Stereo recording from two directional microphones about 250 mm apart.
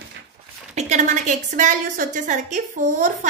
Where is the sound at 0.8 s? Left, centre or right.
Right.